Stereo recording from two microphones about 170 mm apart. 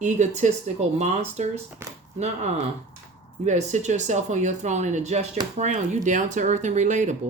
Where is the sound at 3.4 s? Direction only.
45° right (ahead or behind).